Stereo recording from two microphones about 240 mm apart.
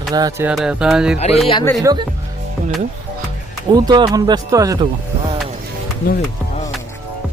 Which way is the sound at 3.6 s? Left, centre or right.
Centre.